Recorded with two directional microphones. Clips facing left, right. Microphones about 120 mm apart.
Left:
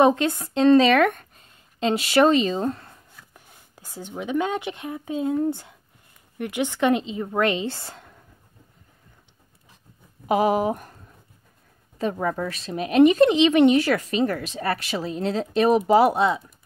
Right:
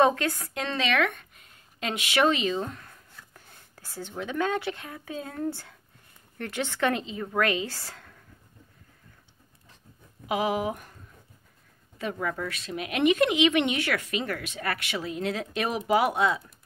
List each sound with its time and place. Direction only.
0.0 s speech: 20° left (ahead or behind)
0.7 s speech: 40° left (ahead or behind)
1.4 s speech: 30° left (ahead or behind)
10.2 s speech: 40° left (ahead or behind)
12.0 s speech: 35° left (ahead or behind)